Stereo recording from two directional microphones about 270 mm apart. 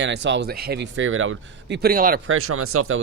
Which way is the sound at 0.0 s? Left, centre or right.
Right.